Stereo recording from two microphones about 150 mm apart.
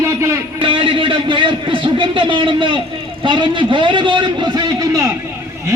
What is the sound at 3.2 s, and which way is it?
A man's voice, 35° right (ahead or behind).